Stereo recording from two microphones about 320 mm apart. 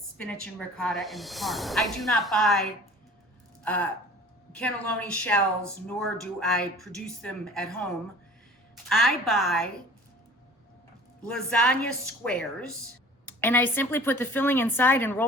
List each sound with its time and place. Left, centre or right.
0.2 s a woman's voice: centre
8.9 s a woman's voice: centre
11.2 s a woman's voice: centre